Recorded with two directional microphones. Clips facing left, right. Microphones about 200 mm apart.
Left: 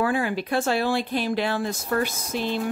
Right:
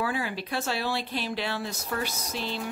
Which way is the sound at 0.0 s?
50° left (ahead or behind).